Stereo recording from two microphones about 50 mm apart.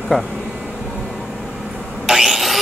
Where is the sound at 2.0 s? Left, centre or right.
Centre.